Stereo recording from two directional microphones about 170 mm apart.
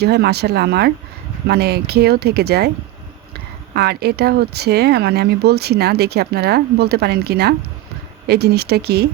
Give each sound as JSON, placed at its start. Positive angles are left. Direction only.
{"t": 0.0, "sound": "speech", "side_deg": -70}